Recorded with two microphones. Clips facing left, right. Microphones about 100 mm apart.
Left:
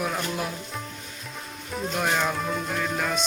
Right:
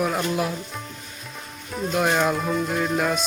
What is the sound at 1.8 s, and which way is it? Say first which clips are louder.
Speech: right 5 dB; 5° right (ahead or behind).